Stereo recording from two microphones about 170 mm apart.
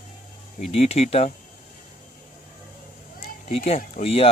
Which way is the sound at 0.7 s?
40° left (ahead or behind).